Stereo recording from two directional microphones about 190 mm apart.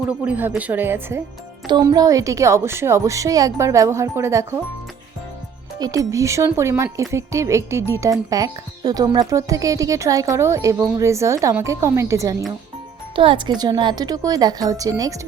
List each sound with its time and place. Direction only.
0.1 s speech: 10° right (ahead or behind)
1.6 s speech: 25° right (ahead or behind)
5.8 s a woman's voice: 20° right (ahead or behind)